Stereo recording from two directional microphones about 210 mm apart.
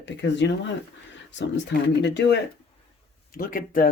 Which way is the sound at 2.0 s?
55° left (ahead or behind).